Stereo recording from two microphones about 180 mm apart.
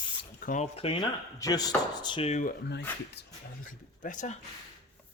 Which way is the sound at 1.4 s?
20° left (ahead or behind).